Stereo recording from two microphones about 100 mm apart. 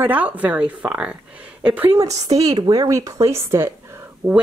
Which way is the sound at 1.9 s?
35° right (ahead or behind).